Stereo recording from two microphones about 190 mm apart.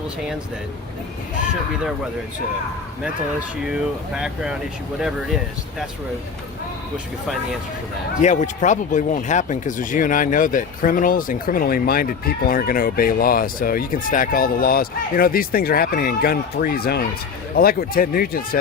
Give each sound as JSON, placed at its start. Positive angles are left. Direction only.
{"t": 3.7, "sound": "speech", "side_deg": -5}
{"t": 8.2, "sound": "speech", "side_deg": 40}